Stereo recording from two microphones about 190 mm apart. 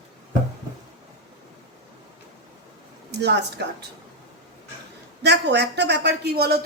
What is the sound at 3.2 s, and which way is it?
Speech, 65° right (ahead or behind).